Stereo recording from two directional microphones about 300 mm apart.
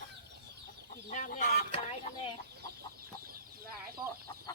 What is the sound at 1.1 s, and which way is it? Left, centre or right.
Chicken, left.